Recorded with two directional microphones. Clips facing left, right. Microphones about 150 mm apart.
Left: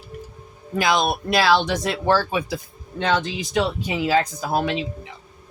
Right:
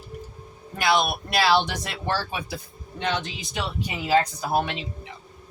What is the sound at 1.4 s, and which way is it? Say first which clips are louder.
Speech: left 2 dB; 90° left.